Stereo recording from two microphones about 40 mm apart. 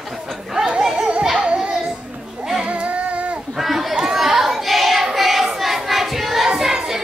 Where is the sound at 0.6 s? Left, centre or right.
Right.